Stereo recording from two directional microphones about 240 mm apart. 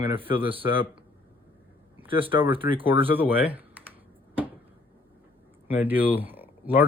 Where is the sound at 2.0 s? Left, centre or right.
Right.